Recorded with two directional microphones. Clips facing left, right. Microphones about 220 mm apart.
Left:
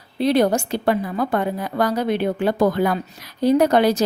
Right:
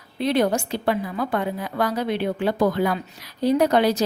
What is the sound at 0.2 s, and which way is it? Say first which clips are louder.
A woman's voice: left 3 dB; 35° left (ahead or behind).